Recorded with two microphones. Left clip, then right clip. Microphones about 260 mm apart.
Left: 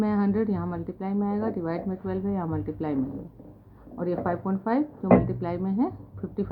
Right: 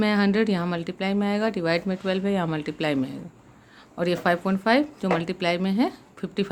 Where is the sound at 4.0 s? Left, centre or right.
Right.